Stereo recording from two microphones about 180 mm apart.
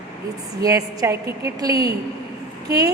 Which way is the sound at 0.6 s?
20° right (ahead or behind).